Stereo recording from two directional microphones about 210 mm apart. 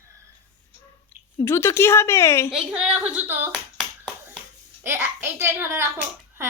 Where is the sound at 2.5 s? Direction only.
5° right (ahead or behind).